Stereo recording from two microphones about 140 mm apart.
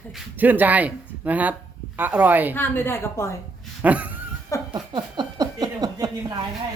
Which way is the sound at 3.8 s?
10° right (ahead or behind).